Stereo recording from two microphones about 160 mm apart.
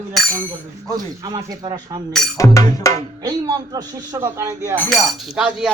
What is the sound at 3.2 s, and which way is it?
Speech, 25° right (ahead or behind).